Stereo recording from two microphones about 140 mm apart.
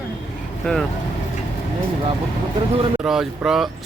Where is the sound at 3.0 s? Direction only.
5° right (ahead or behind).